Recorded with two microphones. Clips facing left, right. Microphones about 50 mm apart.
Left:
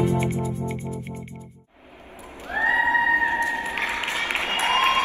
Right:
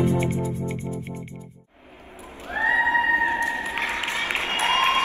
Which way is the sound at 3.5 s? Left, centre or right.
Left.